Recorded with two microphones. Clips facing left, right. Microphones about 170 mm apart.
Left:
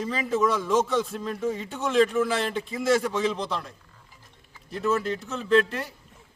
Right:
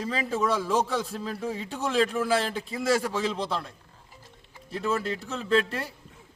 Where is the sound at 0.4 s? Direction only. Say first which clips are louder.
Left 2 dB; 30° right (ahead or behind).